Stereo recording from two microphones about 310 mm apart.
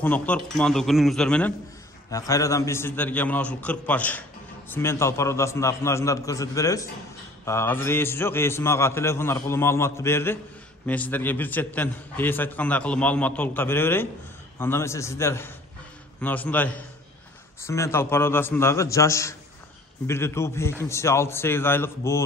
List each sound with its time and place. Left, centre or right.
0.0 s a man's voice: centre